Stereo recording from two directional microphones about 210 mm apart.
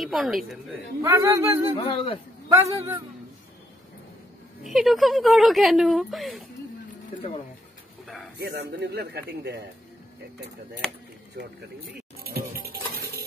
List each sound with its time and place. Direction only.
0.0 s speech: centre (ahead or behind)
1.0 s speech: 10° right (ahead or behind)
1.8 s a man's voice: 25° left (ahead or behind)
2.5 s speech: 10° right (ahead or behind)
4.6 s speech: centre (ahead or behind)
8.5 s speech: 50° right (ahead or behind)
12.2 s music: 45° right (ahead or behind)